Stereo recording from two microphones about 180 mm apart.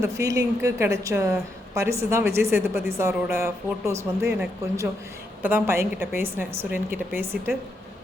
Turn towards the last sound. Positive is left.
turn(degrees=-10)  # may be behind; listen again after turning